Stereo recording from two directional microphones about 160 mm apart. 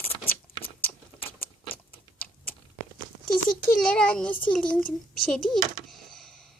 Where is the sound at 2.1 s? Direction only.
10° left (ahead or behind).